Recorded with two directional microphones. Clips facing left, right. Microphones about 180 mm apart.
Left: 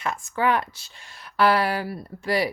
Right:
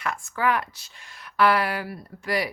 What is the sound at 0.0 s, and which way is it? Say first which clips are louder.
A woman's voice: left 2 dB; 25° left (ahead or behind).